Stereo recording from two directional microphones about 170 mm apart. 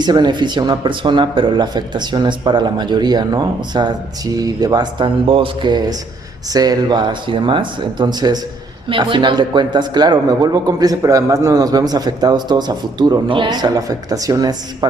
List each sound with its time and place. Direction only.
0.0 s a man's voice: 25° right (ahead or behind)